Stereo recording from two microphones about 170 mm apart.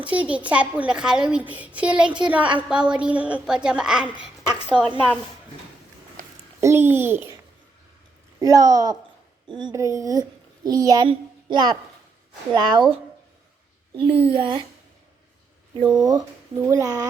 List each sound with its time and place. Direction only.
0.0 s a child's voice: 10° right (ahead or behind)
4.6 s a woman's voice: 10° left (ahead or behind)
6.6 s a child's voice: 15° right (ahead or behind)
8.4 s a woman's voice: 20° right (ahead or behind)
14.0 s a woman's voice: 35° right (ahead or behind)
16.0 s speech: 20° right (ahead or behind)